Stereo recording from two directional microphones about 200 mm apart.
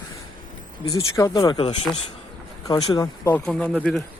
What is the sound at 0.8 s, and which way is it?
Speech, 15° left (ahead or behind).